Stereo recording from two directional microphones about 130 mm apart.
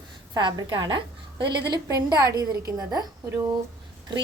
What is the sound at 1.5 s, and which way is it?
A woman's voice, 25° right (ahead or behind).